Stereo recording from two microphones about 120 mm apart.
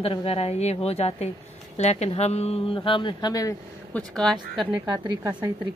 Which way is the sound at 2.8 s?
40° left (ahead or behind).